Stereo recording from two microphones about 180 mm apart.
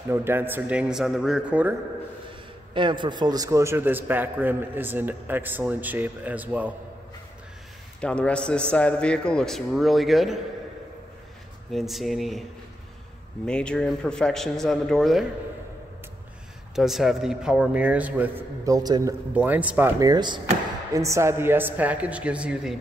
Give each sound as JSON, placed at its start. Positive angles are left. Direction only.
{"t": 0.1, "sound": "a man's voice", "side_deg": -15}
{"t": 2.7, "sound": "a man's voice", "side_deg": -25}
{"t": 8.0, "sound": "a man's voice", "side_deg": 5}
{"t": 11.7, "sound": "a man's voice", "side_deg": 0}
{"t": 13.5, "sound": "a man's voice", "side_deg": 5}
{"t": 16.7, "sound": "a man's voice", "side_deg": 0}
{"t": 18.7, "sound": "a man's voice", "side_deg": -20}
{"t": 19.3, "sound": "a man's voice", "side_deg": -10}
{"t": 20.0, "sound": "a man's voice", "side_deg": -25}